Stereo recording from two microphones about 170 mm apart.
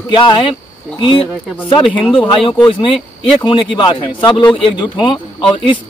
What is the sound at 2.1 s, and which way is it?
Speech, 30° left (ahead or behind).